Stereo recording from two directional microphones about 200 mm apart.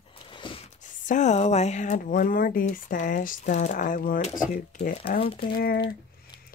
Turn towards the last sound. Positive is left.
turn(degrees=50)  # may be behind; listen again after turning